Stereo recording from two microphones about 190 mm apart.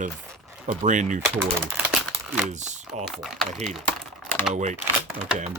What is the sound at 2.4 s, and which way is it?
Speech, 40° right (ahead or behind).